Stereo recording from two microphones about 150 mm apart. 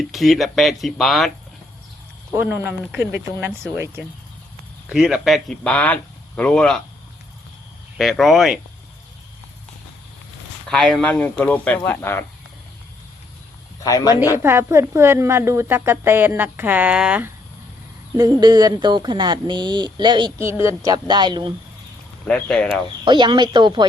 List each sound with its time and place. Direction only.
0.0 s speech: centre (ahead or behind)
2.3 s a woman's voice: 15° right (ahead or behind)
4.9 s speech: 5° right (ahead or behind)
7.9 s speech: centre (ahead or behind)
10.7 s speech: 5° left (ahead or behind)
13.8 s speech: 25° left (ahead or behind)
14.3 s a woman's voice: 15° right (ahead or behind)
18.2 s speech: 25° right (ahead or behind)
20.4 s speech: 20° right (ahead or behind)
22.3 s speech: 5° left (ahead or behind)
22.7 s speech: 30° right (ahead or behind)